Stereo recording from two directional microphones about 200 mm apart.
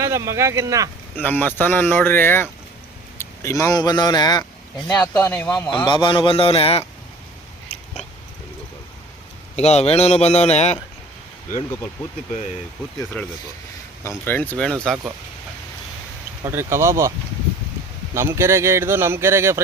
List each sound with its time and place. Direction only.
0.0 s speech: 15° right (ahead or behind)
1.1 s a man's voice: 10° left (ahead or behind)
4.9 s speech: 5° left (ahead or behind)
5.7 s a man's voice: 25° left (ahead or behind)
9.6 s a man's voice: 30° left (ahead or behind)
13.2 s speech: 5° left (ahead or behind)
16.4 s speech: 10° right (ahead or behind)
18.1 s speech: 15° right (ahead or behind)